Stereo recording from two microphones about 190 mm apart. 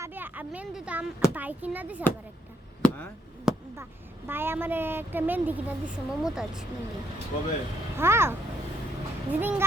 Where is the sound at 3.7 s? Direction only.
10° right (ahead or behind).